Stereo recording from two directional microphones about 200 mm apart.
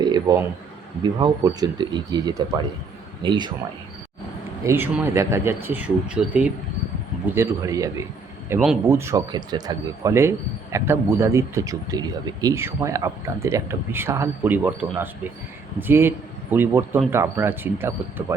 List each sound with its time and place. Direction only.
0.0 s a sound: 20° right (ahead or behind)
1.0 s speech: 20° right (ahead or behind)
4.6 s speech: 10° right (ahead or behind)
8.4 s speech: 5° right (ahead or behind)